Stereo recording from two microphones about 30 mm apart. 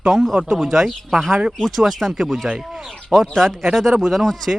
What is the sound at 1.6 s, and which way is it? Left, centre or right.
Speech, centre.